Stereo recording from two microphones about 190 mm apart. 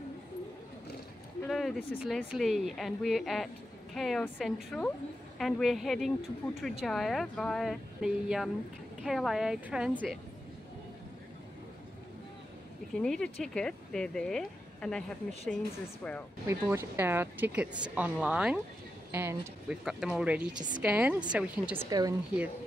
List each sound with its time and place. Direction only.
1.5 s speech: centre (ahead or behind)
12.9 s speech: 5° left (ahead or behind)
16.4 s speech: 10° right (ahead or behind)
21.8 s speech: 20° right (ahead or behind)